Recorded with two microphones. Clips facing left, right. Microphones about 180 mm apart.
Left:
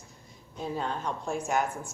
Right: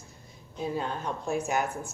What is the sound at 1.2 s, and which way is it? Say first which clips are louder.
Speech: right 1 dB; 5° right (ahead or behind).